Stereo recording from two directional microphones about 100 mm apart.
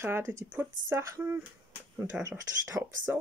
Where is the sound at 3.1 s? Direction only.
20° right (ahead or behind).